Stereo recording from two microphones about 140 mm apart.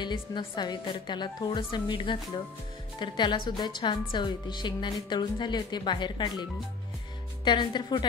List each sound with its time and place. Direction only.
0.0 s a woman's voice: 35° left (ahead or behind)
7.4 s a woman's voice: 35° left (ahead or behind)